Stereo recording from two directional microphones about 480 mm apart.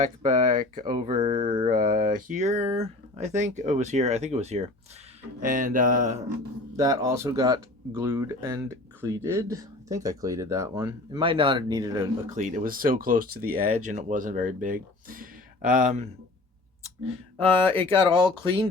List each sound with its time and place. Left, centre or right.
0.0 s speech: centre
17.6 s speech: centre
17.8 s speech: centre